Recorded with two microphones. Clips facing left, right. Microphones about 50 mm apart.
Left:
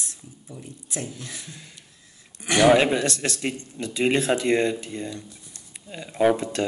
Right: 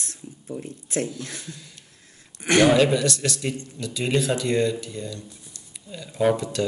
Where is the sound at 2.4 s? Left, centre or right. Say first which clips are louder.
Right 3 dB; right.